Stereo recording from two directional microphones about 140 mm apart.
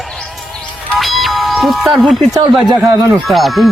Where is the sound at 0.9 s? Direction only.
Centre (ahead or behind).